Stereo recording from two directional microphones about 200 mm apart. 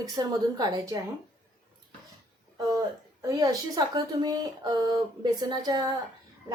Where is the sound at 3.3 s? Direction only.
15° right (ahead or behind).